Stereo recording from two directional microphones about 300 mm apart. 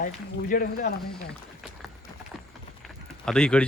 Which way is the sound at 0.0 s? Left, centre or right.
Left.